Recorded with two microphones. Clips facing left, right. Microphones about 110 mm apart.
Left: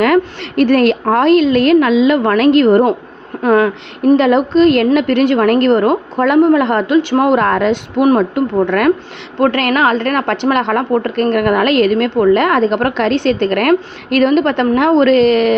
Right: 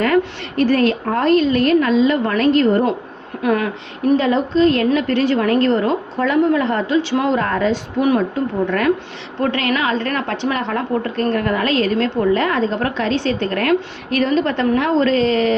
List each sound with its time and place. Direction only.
0.0 s a woman's voice: 70° left (ahead or behind)
3.4 s speech: 45° left (ahead or behind)
4.2 s a woman's voice: 70° left (ahead or behind)